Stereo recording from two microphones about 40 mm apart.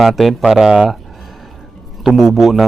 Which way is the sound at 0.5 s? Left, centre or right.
Centre.